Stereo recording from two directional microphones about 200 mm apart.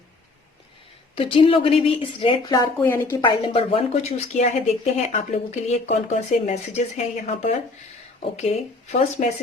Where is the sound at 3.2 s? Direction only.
30° left (ahead or behind).